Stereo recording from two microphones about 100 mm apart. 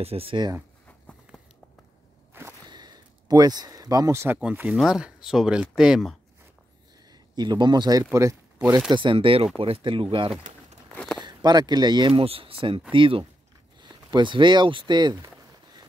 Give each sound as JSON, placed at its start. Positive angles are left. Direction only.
{"t": 0.0, "sound": "speech", "side_deg": -75}
{"t": 2.3, "sound": "whip", "side_deg": -25}
{"t": 2.7, "sound": "a sound", "side_deg": -45}
{"t": 4.4, "sound": "speech", "side_deg": -10}
{"t": 7.1, "sound": "speech", "side_deg": -45}
{"t": 8.0, "sound": "speech", "side_deg": -30}
{"t": 8.9, "sound": "speech", "side_deg": -55}
{"t": 11.2, "sound": "speech", "side_deg": -45}
{"t": 12.1, "sound": "speech", "side_deg": -70}